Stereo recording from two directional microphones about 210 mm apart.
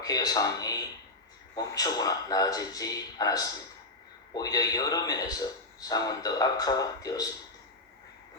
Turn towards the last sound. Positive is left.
turn(degrees=15)  # may be behind; listen again after turning